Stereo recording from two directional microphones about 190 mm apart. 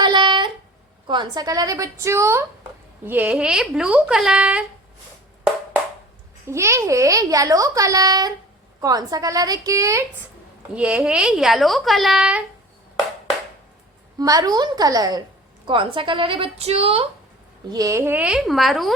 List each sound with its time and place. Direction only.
0.0 s a sound: 25° right (ahead or behind)
1.0 s a woman's voice: 25° right (ahead or behind); by 4.6 s 5° right (ahead or behind)
6.5 s a child's voice: 15° right (ahead or behind)
14.2 s a woman's voice: 20° right (ahead or behind)
17.7 s a woman's voice: 20° right (ahead or behind); by 18.9 s centre (ahead or behind)